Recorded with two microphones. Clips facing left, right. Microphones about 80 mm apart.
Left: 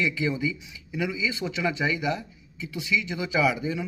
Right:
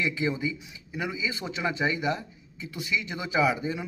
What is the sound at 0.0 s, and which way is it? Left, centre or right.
A man's voice, right.